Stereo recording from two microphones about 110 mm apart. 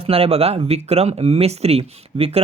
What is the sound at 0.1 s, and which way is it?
Speech, 60° right (ahead or behind).